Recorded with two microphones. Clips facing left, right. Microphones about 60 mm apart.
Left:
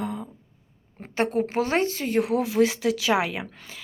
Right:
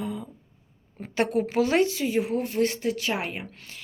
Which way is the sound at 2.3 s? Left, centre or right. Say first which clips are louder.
Left 4 dB; left.